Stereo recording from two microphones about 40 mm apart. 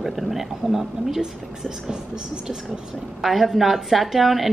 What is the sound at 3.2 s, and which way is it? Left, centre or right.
A woman's voice, centre.